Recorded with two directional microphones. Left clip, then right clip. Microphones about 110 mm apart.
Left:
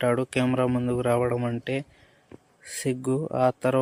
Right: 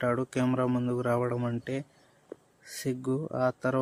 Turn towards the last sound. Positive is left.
turn(degrees=20)  # may be behind; listen again after turning